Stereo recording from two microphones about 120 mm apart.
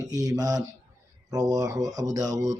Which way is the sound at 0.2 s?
30° right (ahead or behind).